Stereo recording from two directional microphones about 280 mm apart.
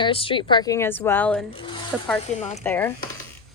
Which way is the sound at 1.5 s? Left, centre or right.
Centre.